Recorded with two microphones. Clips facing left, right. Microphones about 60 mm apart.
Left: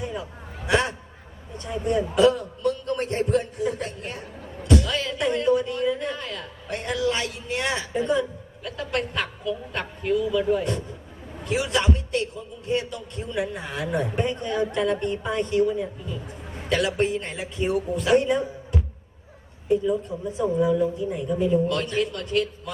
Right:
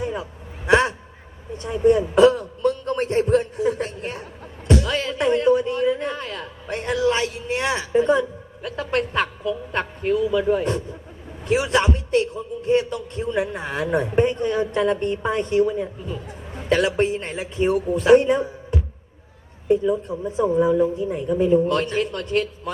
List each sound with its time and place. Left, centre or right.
0.0 s a sound: right
12.9 s a man's voice: right
19.6 s a woman's voice: right